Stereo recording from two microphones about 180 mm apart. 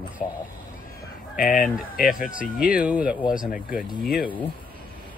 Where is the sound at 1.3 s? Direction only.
50° left (ahead or behind).